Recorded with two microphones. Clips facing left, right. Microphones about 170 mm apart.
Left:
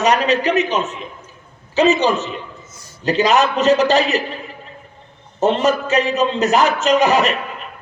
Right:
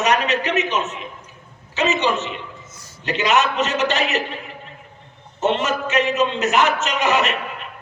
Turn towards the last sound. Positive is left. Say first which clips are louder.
# left 6 dB
turn(degrees=35)  # may be behind; listen again after turning